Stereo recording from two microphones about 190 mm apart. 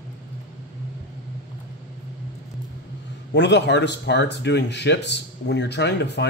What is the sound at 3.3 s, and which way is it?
Speech, 65° left (ahead or behind).